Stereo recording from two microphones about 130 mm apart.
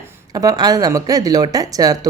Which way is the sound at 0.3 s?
30° right (ahead or behind).